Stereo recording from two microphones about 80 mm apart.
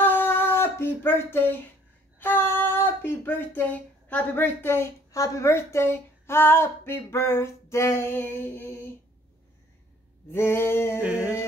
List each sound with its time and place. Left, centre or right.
0.0 s a sound: left
2.1 s speech: left
10.3 s male singing: left